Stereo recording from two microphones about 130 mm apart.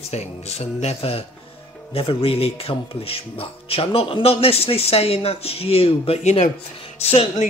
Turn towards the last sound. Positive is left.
turn(degrees=50)  # may be behind; listen again after turning